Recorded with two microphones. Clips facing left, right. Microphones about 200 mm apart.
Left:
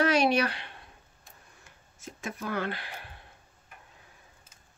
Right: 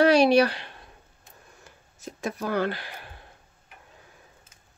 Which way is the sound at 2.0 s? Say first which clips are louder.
Right 6 dB; 40° right (ahead or behind).